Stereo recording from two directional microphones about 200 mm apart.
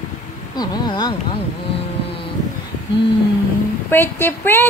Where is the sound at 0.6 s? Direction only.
20° left (ahead or behind).